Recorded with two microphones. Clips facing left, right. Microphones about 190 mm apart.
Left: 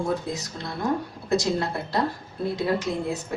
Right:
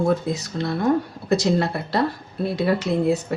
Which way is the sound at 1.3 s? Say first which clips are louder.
Right 4 dB; 70° right (ahead or behind).